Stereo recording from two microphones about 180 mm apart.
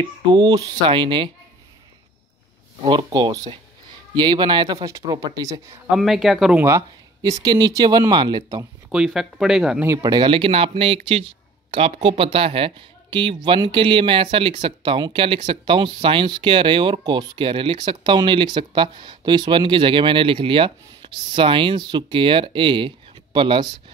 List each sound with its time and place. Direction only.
0.3 s speech: 20° right (ahead or behind)
2.8 s speech: 25° right (ahead or behind)
5.9 s speech: centre (ahead or behind)
6.6 s speech: 20° right (ahead or behind)
8.9 s speech: centre (ahead or behind)
9.8 s speech: 20° right (ahead or behind)